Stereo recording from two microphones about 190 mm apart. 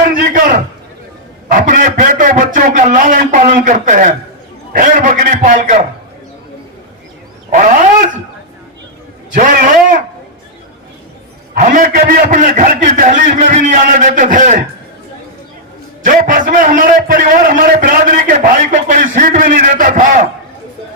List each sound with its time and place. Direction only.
0.1 s a sound: 45° right (ahead or behind)
1.5 s a man's voice: 45° right (ahead or behind)
7.5 s speech: 45° right (ahead or behind)
9.3 s a man's voice: 45° right (ahead or behind)
11.6 s a man's voice: 45° right (ahead or behind)
16.0 s a man's voice: 45° right (ahead or behind)